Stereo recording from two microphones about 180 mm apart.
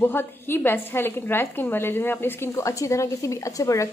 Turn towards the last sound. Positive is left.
turn(degrees=15)  # may be behind; listen again after turning